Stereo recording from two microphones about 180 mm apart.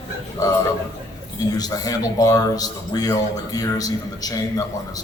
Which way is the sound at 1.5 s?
20° left (ahead or behind).